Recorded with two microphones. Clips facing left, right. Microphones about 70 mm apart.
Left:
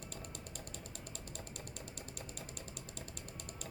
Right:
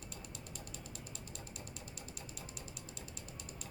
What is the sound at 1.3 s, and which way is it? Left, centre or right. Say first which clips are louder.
Mechanisms: left 1 dB; left.